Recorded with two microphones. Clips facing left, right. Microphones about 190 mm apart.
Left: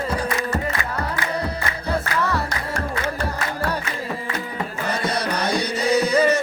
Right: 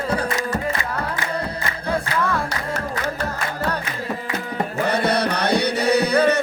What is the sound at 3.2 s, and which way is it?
Music, 10° left (ahead or behind).